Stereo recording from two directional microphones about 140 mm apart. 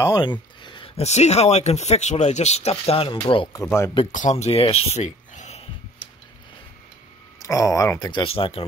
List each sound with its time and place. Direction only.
0.0 s a sound: 30° left (ahead or behind)
1.0 s speech: 50° left (ahead or behind)
3.6 s speech: 20° left (ahead or behind)
4.1 s speech: 60° left (ahead or behind)
7.3 s speech: 25° left (ahead or behind); by 8.6 s 40° left (ahead or behind)